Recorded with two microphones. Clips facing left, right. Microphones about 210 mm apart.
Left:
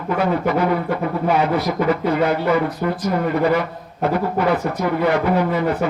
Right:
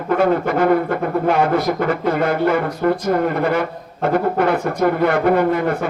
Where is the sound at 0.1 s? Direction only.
50° right (ahead or behind).